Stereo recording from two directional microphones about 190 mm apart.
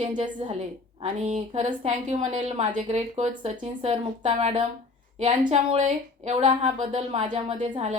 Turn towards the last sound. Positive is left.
turn(degrees=-35)  # may be behind; listen again after turning